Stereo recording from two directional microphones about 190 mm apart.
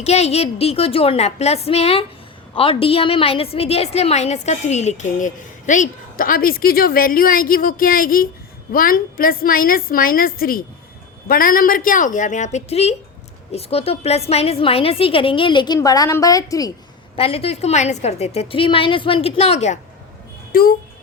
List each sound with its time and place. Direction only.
0.0 s a woman's voice: 35° left (ahead or behind); by 16.7 s 20° left (ahead or behind)
17.2 s a woman's voice: 30° left (ahead or behind)
20.5 s speech: 50° left (ahead or behind)